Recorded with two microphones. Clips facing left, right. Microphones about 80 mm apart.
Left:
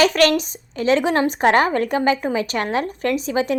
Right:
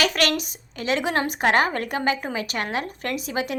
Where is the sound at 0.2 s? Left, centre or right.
Left.